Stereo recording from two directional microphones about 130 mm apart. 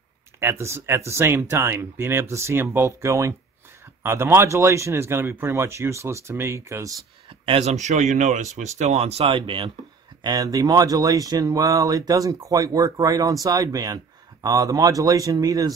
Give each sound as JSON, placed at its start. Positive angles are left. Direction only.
{"t": 0.4, "sound": "speech", "side_deg": -20}
{"t": 7.2, "sound": "speech", "side_deg": -50}
{"t": 10.2, "sound": "speech", "side_deg": -30}